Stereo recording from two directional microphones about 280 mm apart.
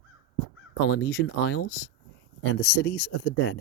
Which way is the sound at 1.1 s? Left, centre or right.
Left.